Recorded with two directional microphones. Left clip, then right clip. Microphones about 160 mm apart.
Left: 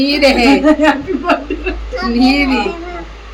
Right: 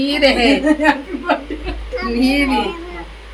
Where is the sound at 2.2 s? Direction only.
5° right (ahead or behind).